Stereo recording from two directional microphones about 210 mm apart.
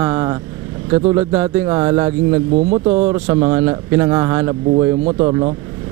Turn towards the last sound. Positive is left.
turn(degrees=-25)  # may be behind; listen again after turning